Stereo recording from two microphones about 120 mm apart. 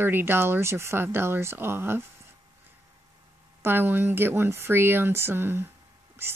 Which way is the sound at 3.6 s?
15° right (ahead or behind).